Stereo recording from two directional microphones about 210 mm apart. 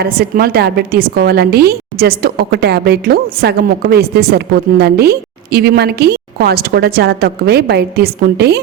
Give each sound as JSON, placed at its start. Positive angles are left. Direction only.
{"t": 0.0, "sound": "a woman's voice", "side_deg": -45}